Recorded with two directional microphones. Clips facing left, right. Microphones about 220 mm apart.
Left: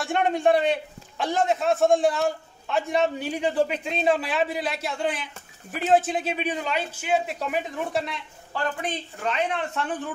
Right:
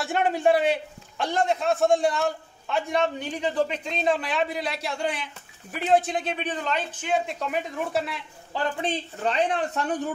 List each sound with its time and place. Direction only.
0.0 s a man's voice: centre (ahead or behind)
8.8 s speech: 35° right (ahead or behind)